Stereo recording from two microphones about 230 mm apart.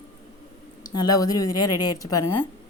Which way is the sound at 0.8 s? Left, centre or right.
Centre.